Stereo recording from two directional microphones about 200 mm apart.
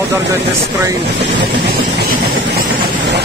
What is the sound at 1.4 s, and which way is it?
Vehicle, 55° right (ahead or behind).